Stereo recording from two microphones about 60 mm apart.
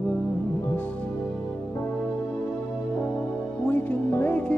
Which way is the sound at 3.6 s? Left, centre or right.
Left.